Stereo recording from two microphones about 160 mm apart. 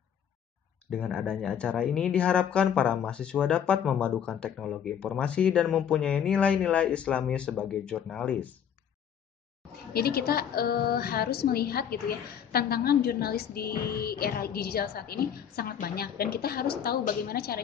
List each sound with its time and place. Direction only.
0.8 s speech: centre (ahead or behind)
9.9 s a woman's voice: 75° left (ahead or behind)